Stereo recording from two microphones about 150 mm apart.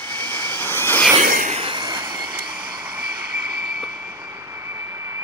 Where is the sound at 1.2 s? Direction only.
70° right (ahead or behind).